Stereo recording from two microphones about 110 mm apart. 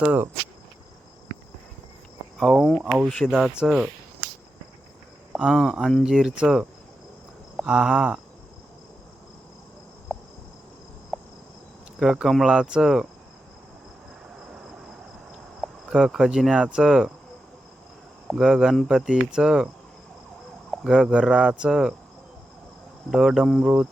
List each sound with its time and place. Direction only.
0.0 s speech: 15° right (ahead or behind)
2.4 s speech: centre (ahead or behind)
5.3 s speech: 5° right (ahead or behind)
10.1 s cricket: centre (ahead or behind)
11.9 s speech: 5° right (ahead or behind)
14.5 s cricket: 10° right (ahead or behind)
15.6 s speech: 5° right (ahead or behind)
18.3 s speech: 5° right (ahead or behind)
20.8 s speech: 10° right (ahead or behind)
23.1 s speech: 5° right (ahead or behind)